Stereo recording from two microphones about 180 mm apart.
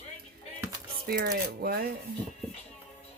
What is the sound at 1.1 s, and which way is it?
Speech, 55° right (ahead or behind).